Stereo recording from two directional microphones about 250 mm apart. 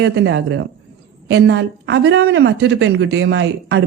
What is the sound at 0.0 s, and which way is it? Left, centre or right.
Speech, right.